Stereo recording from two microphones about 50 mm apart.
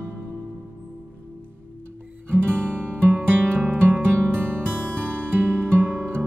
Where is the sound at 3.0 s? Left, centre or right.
Right.